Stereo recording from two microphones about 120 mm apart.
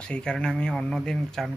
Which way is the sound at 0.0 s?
5° left (ahead or behind).